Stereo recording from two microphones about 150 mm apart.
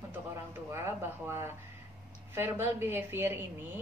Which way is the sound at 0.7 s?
15° right (ahead or behind).